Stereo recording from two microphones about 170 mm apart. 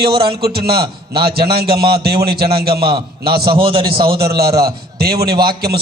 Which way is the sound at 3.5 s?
30° right (ahead or behind).